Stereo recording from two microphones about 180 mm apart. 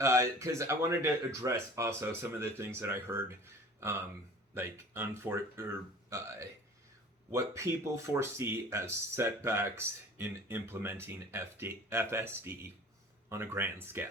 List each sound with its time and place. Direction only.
0.0 s speech: 15° right (ahead or behind)